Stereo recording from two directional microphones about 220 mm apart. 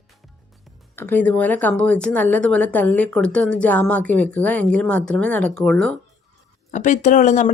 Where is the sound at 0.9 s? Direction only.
10° left (ahead or behind).